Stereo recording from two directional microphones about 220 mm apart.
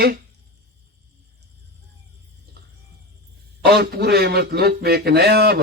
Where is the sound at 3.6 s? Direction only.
45° right (ahead or behind).